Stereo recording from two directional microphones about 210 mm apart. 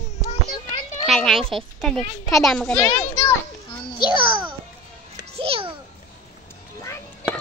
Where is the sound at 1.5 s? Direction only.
Centre (ahead or behind).